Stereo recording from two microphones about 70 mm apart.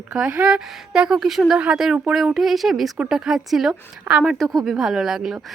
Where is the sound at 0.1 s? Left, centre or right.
Centre.